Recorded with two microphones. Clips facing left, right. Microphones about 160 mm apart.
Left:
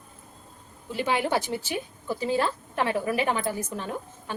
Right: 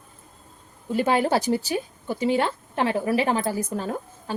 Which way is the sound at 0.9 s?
45° right (ahead or behind).